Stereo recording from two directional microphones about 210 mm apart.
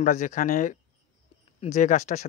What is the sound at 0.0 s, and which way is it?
Speech, 35° left (ahead or behind).